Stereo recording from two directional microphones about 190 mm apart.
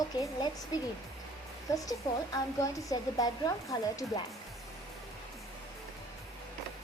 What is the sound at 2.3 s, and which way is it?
Speech, 15° left (ahead or behind).